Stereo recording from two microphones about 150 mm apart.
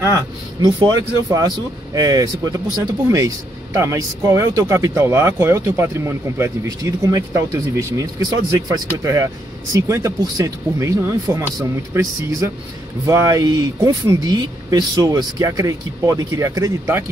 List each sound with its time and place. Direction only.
0.0 s speech: 25° right (ahead or behind)